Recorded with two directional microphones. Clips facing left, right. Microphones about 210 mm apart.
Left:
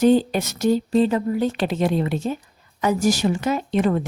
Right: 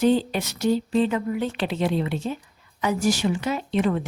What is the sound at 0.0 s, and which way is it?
Speech, 45° left (ahead or behind).